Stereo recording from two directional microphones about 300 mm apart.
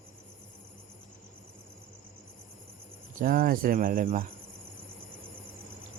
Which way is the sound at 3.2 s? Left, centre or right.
Right.